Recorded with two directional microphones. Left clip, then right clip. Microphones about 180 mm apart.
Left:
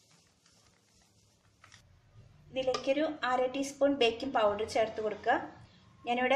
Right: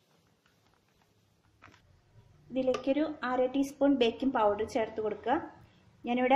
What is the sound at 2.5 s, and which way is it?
Speech, 40° right (ahead or behind).